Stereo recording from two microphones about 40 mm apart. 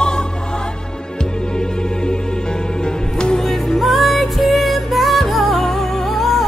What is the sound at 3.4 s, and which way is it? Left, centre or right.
Music, centre.